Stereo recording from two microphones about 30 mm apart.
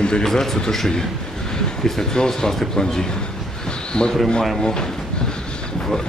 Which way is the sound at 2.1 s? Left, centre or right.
Left.